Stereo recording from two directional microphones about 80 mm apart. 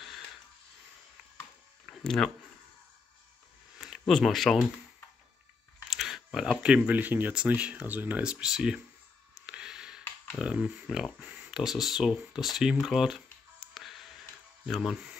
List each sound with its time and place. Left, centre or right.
1.9 s a sound: centre
3.7 s a sound: centre
4.0 s speech: centre
5.9 s speech: centre
9.3 s a sound: centre
10.3 s speech: centre
11.1 s speech: centre
11.5 s speech: centre
13.6 s music: centre
14.7 s speech: centre